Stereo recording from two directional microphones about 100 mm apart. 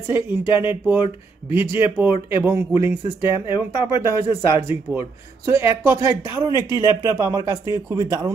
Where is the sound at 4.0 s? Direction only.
25° right (ahead or behind).